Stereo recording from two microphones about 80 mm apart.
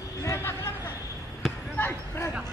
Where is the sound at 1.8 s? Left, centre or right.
Left.